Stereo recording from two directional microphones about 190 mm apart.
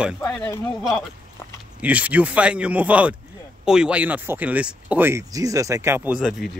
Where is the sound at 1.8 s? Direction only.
5° right (ahead or behind).